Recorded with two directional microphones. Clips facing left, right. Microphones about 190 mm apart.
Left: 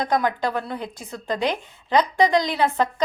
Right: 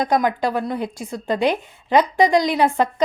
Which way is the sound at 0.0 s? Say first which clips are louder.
Right 3 dB; 20° right (ahead or behind).